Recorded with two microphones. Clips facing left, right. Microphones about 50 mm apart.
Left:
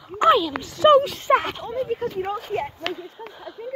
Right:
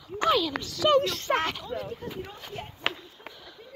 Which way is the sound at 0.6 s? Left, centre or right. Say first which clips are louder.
Left 8 dB; left.